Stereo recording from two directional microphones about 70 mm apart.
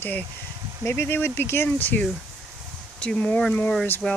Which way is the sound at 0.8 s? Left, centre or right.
Left.